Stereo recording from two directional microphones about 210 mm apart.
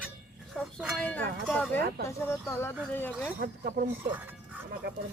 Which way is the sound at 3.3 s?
45° right (ahead or behind).